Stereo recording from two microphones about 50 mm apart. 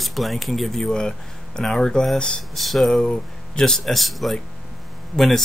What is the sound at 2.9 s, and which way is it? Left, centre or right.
Speech, centre.